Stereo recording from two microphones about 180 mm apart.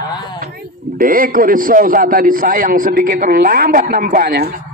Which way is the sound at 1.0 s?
50° right (ahead or behind).